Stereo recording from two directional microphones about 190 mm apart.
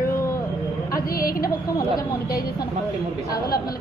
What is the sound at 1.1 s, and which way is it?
Speech, 50° left (ahead or behind).